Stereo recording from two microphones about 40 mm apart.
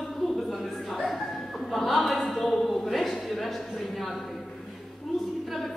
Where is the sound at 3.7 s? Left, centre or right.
Centre.